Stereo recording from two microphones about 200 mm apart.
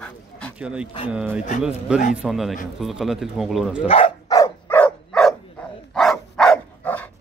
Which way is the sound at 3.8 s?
30° left (ahead or behind).